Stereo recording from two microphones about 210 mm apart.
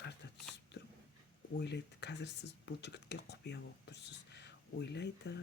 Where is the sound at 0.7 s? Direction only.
55° left (ahead or behind).